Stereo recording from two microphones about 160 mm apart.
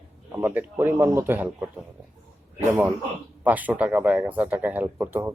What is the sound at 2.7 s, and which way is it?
Speech, 15° right (ahead or behind).